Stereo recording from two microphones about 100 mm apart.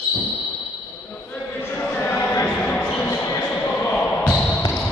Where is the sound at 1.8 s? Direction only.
20° left (ahead or behind).